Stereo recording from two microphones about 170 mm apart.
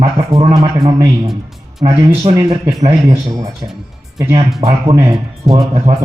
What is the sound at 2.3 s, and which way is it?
Speech, 20° right (ahead or behind).